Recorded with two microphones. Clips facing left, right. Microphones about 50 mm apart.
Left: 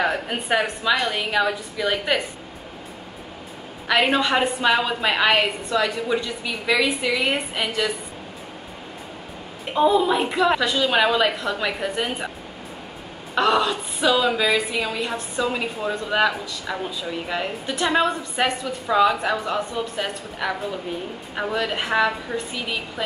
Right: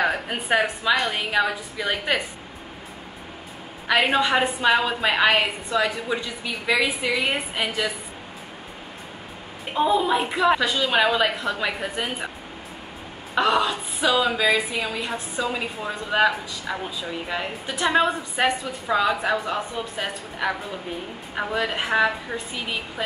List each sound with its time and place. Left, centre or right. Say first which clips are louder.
0.0 s a woman's voice: left 1 dB; centre
3.8 s a woman's voice: even; centre
9.8 s a woman's voice: left 2 dB; centre
13.3 s a woman's voice: left 1 dB; centre